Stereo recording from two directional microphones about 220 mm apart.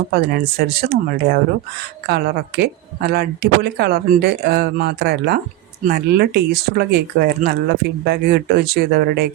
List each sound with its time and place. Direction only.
0.1 s speech: 45° right (ahead or behind)